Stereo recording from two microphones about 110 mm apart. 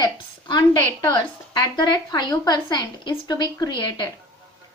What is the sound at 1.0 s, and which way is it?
A woman's voice, 40° left (ahead or behind).